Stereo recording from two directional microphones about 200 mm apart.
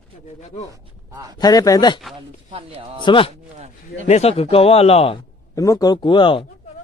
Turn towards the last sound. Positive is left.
turn(degrees=25)  # may be behind; listen again after turning